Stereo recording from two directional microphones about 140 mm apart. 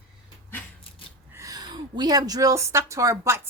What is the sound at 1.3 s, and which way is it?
A woman's voice, 25° right (ahead or behind).